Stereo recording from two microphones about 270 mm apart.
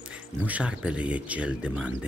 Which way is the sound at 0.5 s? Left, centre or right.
Centre.